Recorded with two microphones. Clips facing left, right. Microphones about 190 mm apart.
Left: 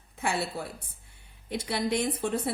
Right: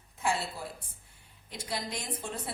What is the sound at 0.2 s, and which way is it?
A woman's voice, 65° left (ahead or behind).